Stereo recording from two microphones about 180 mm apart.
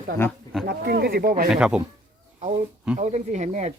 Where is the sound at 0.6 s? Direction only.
60° right (ahead or behind).